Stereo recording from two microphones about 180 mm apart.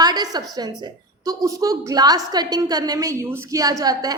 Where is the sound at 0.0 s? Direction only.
20° right (ahead or behind).